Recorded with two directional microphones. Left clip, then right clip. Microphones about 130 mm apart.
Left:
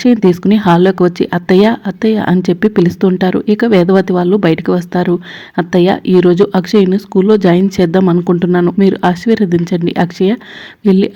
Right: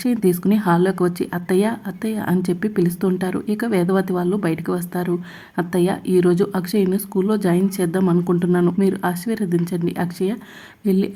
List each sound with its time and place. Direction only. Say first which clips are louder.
0.0 s speech: left 9 dB; 35° left (ahead or behind)